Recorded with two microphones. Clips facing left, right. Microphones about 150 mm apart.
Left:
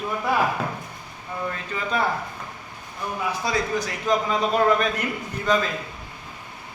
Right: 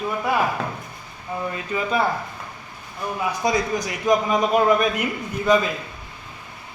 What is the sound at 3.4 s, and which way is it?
A man's voice, 15° right (ahead or behind).